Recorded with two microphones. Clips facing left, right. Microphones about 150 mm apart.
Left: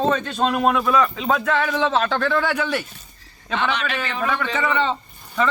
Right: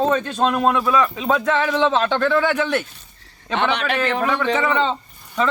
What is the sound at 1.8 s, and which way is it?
Speech, 20° right (ahead or behind).